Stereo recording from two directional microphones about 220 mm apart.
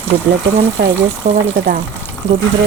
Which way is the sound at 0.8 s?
50° right (ahead or behind).